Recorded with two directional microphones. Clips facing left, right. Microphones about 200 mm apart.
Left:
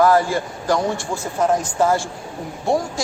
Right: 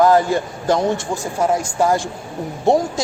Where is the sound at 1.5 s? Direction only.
10° right (ahead or behind).